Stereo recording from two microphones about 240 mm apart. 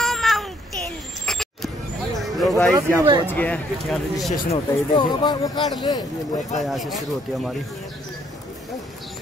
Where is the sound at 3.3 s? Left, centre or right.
Centre.